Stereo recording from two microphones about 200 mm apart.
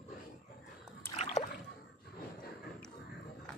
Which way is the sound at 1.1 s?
35° left (ahead or behind).